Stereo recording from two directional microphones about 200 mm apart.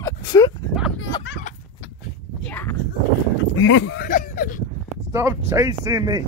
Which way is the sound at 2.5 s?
10° left (ahead or behind).